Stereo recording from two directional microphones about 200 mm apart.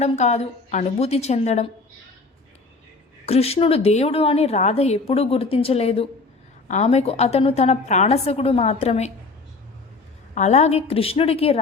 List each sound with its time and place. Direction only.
0.0 s a woman's voice: 35° left (ahead or behind)
3.2 s a woman's voice: 30° left (ahead or behind)
10.3 s a woman's voice: 35° left (ahead or behind)